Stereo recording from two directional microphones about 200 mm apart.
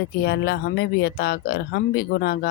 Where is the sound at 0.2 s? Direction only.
55° left (ahead or behind).